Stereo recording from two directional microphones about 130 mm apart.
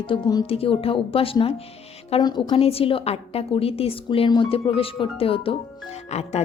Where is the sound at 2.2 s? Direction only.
35° left (ahead or behind).